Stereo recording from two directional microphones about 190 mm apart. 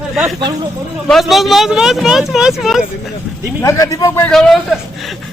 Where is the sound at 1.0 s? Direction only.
Centre (ahead or behind).